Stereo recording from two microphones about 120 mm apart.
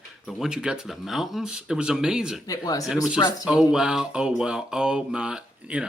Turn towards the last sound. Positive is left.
turn(degrees=-10)  # may be behind; listen again after turning